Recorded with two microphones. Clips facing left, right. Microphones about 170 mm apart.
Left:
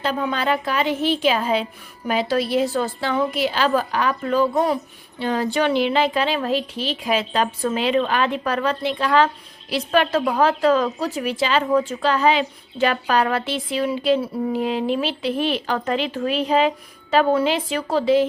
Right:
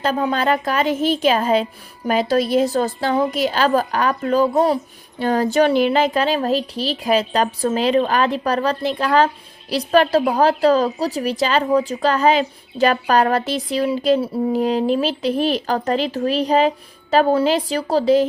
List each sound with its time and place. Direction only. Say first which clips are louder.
0.0 s a woman's voice: right 3 dB; 40° right (ahead or behind)
5.2 s a woman's voice: right 4 dB; 45° right (ahead or behind)